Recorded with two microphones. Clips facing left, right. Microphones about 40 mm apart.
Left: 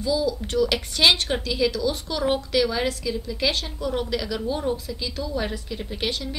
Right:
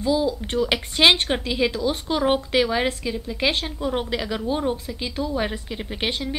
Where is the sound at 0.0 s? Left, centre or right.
Right.